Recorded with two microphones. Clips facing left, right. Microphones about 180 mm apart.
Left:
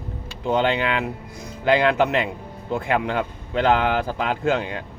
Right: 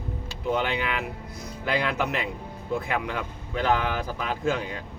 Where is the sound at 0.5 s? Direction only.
90° left.